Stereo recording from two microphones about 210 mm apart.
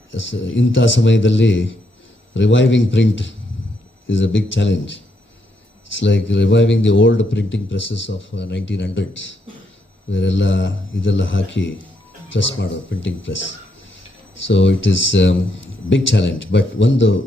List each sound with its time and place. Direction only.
0.1 s speech: 60° left (ahead or behind)
14.4 s speech: 60° left (ahead or behind)